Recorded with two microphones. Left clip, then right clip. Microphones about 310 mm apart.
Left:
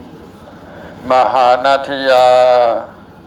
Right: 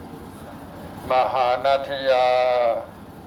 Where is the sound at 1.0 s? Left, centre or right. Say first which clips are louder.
Left 9 dB; left.